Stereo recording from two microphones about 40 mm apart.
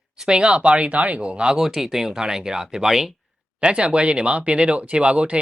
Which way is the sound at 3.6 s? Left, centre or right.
Right.